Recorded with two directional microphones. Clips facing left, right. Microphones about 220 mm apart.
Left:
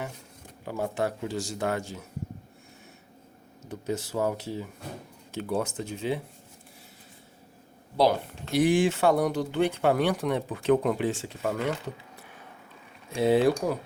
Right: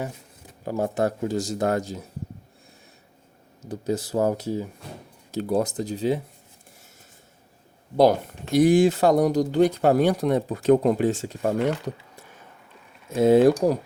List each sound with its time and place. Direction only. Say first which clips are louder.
0.6 s speech: right 5 dB; 40° right (ahead or behind)
3.7 s speech: right 5 dB; 35° right (ahead or behind)
7.9 s speech: right 5 dB; 45° right (ahead or behind)
13.1 s speech: right 6 dB; 45° right (ahead or behind)